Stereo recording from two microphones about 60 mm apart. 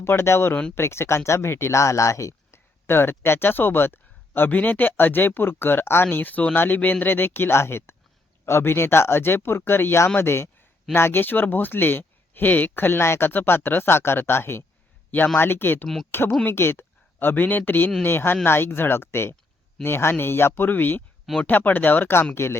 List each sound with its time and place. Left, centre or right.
0.0 s speech: left
2.8 s speech: left